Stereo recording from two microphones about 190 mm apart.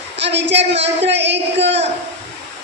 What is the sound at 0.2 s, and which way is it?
Speech, 65° right (ahead or behind).